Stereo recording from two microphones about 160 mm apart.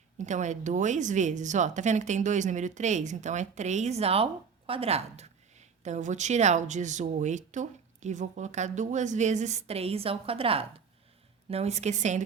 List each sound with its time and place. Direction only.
0.2 s speech: 50° right (ahead or behind)